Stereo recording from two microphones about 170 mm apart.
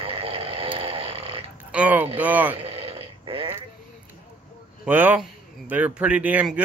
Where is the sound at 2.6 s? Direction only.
35° right (ahead or behind).